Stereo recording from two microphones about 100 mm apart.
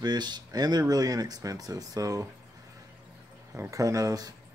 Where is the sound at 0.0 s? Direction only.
45° right (ahead or behind).